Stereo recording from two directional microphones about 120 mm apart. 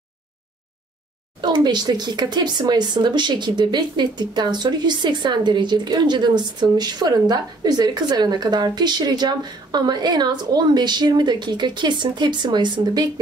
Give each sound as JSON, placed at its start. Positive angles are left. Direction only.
{"t": 1.4, "sound": "speech", "side_deg": -40}